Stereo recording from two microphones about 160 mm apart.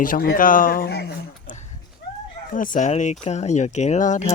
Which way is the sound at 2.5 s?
55° left (ahead or behind).